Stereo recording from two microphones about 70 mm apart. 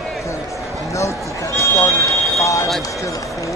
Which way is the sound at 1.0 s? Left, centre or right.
Left.